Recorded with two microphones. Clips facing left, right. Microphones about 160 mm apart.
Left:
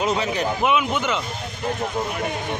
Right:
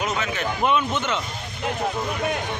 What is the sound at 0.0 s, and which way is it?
Speech, 35° left (ahead or behind).